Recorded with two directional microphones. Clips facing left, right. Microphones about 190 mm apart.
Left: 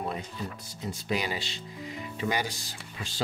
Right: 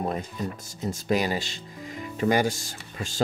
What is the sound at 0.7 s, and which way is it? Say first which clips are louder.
Speech: right 7 dB; 45° right (ahead or behind).